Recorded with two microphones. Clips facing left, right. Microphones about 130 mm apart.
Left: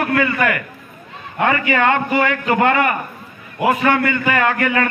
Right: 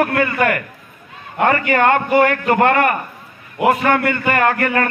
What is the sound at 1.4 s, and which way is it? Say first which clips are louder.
A man's voice: right 2 dB; 45° right (ahead or behind).